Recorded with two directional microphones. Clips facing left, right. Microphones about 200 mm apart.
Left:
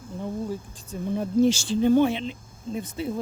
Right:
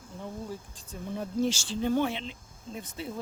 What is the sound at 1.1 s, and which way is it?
Speech, 20° left (ahead or behind).